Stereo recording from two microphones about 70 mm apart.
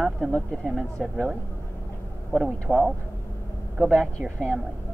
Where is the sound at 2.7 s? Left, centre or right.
Centre.